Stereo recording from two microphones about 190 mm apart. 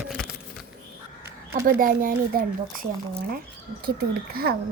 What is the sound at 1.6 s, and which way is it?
Speech, 45° right (ahead or behind).